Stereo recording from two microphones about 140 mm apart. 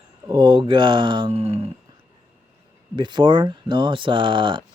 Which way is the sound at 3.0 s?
35° right (ahead or behind).